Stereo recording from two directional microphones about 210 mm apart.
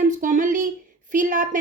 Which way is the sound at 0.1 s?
40° right (ahead or behind).